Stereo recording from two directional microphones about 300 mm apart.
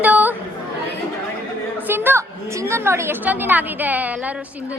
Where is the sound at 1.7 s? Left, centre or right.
Centre.